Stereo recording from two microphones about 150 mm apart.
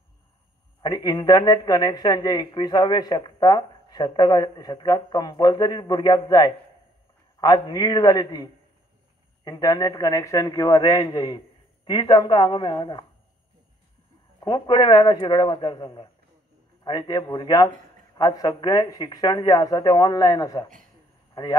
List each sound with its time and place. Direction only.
0.8 s a woman's voice: 25° left (ahead or behind)
14.4 s a woman's voice: 30° left (ahead or behind)